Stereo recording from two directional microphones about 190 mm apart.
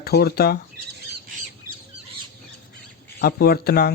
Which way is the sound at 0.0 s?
55° left (ahead or behind).